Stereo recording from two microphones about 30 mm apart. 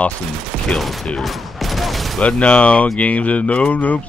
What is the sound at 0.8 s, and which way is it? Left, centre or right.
Speech, centre.